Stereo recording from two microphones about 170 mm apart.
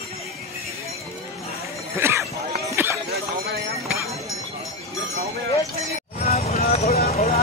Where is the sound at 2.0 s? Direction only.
15° right (ahead or behind).